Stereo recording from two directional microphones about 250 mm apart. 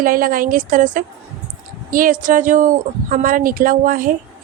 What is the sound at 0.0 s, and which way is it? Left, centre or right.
A woman's voice, right.